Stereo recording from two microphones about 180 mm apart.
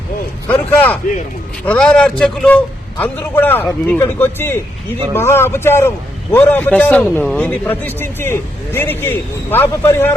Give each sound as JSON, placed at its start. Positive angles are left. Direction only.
{"t": 0.7, "sound": "a man's voice", "side_deg": 10}